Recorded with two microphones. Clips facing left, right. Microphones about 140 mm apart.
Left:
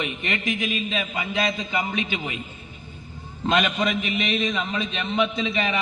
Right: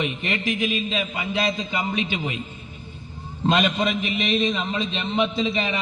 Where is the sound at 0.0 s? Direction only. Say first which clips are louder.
Right 2 dB; 30° right (ahead or behind).